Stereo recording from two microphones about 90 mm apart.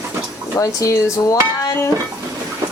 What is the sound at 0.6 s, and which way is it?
Dishes, 40° left (ahead or behind).